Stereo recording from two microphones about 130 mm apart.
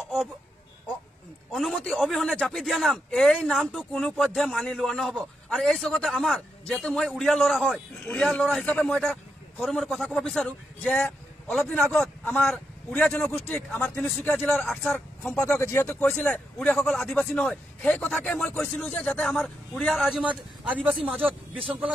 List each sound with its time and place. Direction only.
1.5 s a man's voice: centre (ahead or behind)
15.6 s a man's voice: 20° left (ahead or behind); by 21.9 s 10° right (ahead or behind)